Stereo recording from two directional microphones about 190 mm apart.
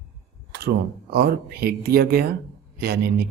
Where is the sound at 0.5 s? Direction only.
55° right (ahead or behind).